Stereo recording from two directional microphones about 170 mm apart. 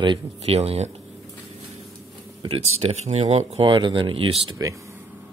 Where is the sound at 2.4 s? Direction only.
35° right (ahead or behind).